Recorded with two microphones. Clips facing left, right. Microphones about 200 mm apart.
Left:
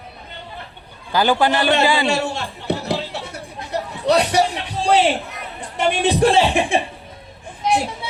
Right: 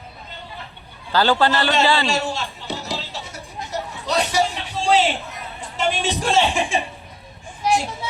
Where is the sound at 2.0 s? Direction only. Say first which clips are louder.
Left 3 dB; 60° left (ahead or behind).